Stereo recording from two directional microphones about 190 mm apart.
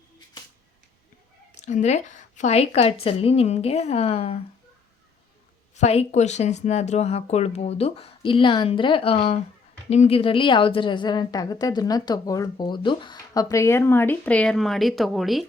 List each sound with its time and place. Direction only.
1.6 s speech: 35° left (ahead or behind)
5.7 s a woman's voice: 35° left (ahead or behind); by 15.4 s centre (ahead or behind)